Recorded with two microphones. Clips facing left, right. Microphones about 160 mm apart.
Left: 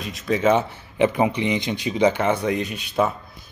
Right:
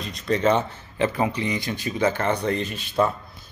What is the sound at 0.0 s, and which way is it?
Speech, 5° left (ahead or behind).